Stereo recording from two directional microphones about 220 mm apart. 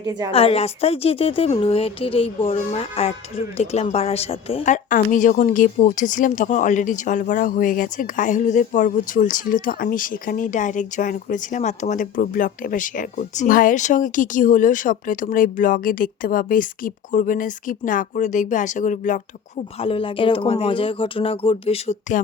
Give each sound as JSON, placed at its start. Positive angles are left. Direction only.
{"t": 0.0, "sound": "a woman's voice", "side_deg": -15}
{"t": 0.3, "sound": "speech", "side_deg": 25}
{"t": 19.8, "sound": "speech", "side_deg": 25}